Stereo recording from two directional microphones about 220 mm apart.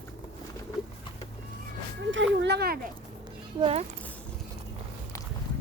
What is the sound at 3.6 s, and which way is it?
Speech, 25° right (ahead or behind).